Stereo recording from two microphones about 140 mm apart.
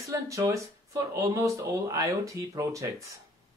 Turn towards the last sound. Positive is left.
turn(degrees=-20)  # may be behind; listen again after turning